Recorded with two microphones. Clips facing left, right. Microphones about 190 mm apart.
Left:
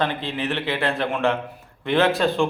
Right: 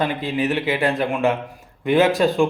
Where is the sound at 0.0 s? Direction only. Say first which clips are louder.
Right 3 dB; 10° right (ahead or behind).